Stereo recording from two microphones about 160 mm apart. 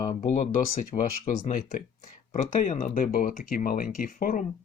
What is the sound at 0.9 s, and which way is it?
Speech, 55° left (ahead or behind).